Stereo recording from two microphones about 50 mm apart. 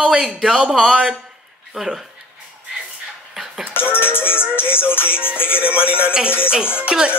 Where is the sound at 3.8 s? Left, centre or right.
Left.